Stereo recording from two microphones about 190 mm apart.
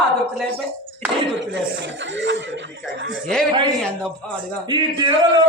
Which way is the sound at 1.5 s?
70° right (ahead or behind).